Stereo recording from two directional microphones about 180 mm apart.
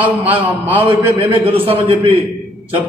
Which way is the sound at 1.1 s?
30° right (ahead or behind).